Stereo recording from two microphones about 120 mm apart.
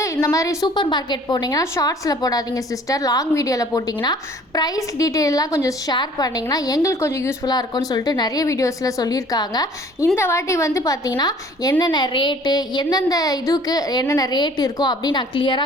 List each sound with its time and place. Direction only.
0.0 s a woman's voice: 25° left (ahead or behind)
7.4 s a woman's voice: 35° left (ahead or behind)
10.2 s a woman's voice: 20° left (ahead or behind); by 15.6 s 40° left (ahead or behind)